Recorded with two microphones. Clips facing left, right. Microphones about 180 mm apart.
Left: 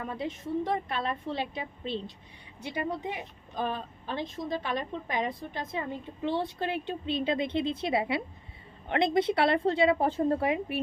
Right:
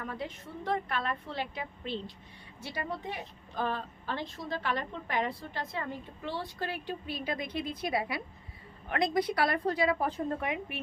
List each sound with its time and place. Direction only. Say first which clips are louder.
0.0 s speech: left 4 dB; 20° left (ahead or behind)